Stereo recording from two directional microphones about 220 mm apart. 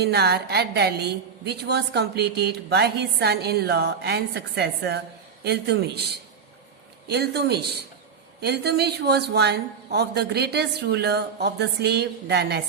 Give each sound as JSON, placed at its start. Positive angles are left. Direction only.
{"t": 0.0, "sound": "a woman's voice", "side_deg": -50}
{"t": 7.1, "sound": "a woman's voice", "side_deg": -50}